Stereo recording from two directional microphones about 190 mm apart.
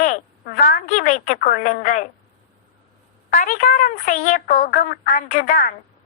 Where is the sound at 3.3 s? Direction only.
40° left (ahead or behind).